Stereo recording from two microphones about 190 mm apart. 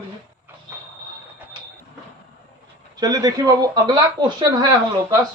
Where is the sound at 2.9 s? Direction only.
20° right (ahead or behind).